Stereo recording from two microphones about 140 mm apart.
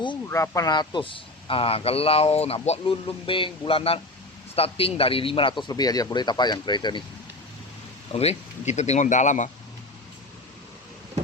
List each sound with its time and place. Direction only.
0.3 s speech: 20° left (ahead or behind)
8.1 s speech: 45° left (ahead or behind)